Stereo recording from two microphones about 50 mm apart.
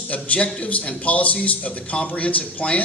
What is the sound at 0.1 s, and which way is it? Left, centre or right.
Speech, left.